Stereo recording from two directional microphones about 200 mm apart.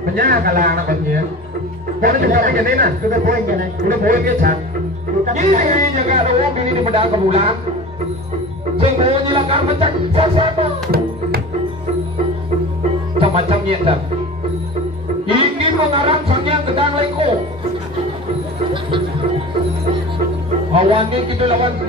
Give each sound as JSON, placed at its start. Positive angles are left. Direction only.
{"t": 0.0, "sound": "a man's voice", "side_deg": -45}
{"t": 8.7, "sound": "speech", "side_deg": -25}
{"t": 13.2, "sound": "speech", "side_deg": -30}
{"t": 15.2, "sound": "speech", "side_deg": -25}
{"t": 18.7, "sound": "music", "side_deg": -25}
{"t": 20.7, "sound": "a man's voice", "side_deg": -25}